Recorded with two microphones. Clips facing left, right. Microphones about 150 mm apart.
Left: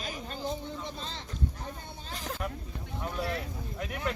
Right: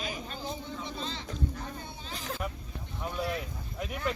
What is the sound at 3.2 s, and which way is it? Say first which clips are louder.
Speech: even; 10° right (ahead or behind).